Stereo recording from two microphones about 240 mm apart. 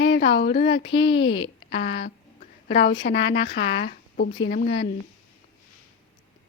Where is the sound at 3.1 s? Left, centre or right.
Left.